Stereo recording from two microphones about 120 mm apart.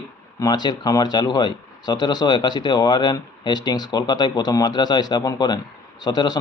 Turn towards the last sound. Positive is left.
turn(degrees=35)  # may be behind; listen again after turning